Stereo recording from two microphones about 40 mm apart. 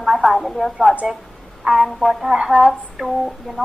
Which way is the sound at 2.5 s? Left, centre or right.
Right.